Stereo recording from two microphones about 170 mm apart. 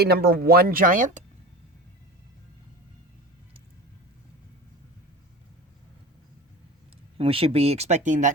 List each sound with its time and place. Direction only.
0.0 s speech: 70° right (ahead or behind); by 1.2 s 50° right (ahead or behind)
7.2 s speech: 35° right (ahead or behind)